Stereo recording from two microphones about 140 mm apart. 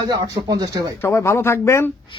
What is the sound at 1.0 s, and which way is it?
Speech, 20° left (ahead or behind).